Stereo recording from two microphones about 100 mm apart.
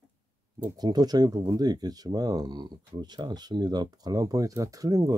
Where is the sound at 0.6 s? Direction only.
40° right (ahead or behind).